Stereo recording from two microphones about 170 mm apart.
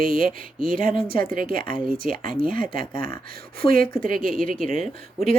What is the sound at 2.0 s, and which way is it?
Speech, 55° right (ahead or behind).